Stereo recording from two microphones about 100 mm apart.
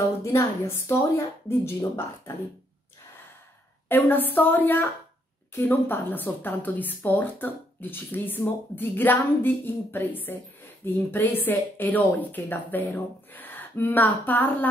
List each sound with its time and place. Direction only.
0.2 s speech: 25° left (ahead or behind)
3.9 s speech: 20° left (ahead or behind)